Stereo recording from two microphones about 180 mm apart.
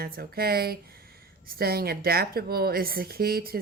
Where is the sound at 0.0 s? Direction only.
60° right (ahead or behind).